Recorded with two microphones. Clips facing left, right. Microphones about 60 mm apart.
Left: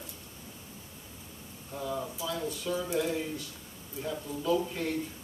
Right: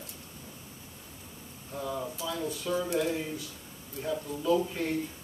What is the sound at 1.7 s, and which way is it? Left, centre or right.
Speech, centre.